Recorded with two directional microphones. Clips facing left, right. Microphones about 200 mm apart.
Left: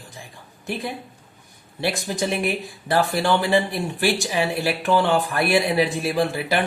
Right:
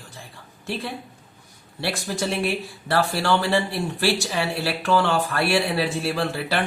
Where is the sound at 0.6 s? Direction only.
15° left (ahead or behind).